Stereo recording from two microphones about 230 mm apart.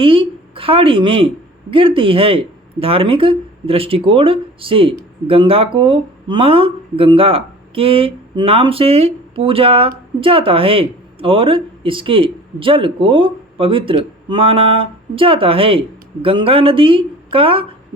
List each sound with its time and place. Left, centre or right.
0.0 s speech: right